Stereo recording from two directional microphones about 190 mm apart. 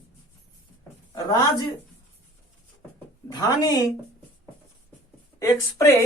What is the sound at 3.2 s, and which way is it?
Speech, 20° left (ahead or behind).